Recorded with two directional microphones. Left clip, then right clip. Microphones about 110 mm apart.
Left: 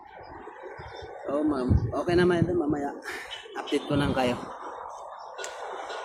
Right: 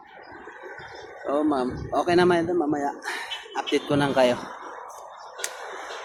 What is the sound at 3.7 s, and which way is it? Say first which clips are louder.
Speech: right 5 dB; 40° left (ahead or behind).